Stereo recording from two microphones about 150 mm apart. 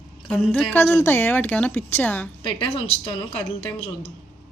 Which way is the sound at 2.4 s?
35° left (ahead or behind).